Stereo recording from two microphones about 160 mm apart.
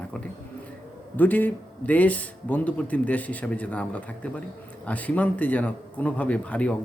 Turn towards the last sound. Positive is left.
turn(degrees=10)  # may be behind; listen again after turning